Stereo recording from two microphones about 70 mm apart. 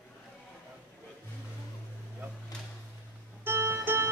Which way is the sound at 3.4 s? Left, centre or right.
Right.